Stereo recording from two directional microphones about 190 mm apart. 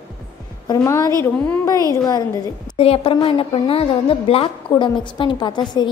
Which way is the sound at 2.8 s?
30° left (ahead or behind).